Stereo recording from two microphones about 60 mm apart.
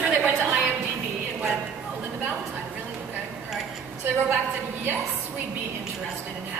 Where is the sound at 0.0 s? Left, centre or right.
Right.